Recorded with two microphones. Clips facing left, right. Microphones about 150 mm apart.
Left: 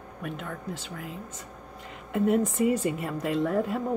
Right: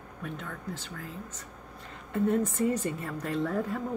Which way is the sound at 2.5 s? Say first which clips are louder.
Left 4 dB; 90° left.